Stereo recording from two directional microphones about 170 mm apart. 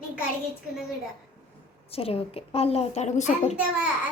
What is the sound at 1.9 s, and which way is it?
A child's voice, 35° left (ahead or behind).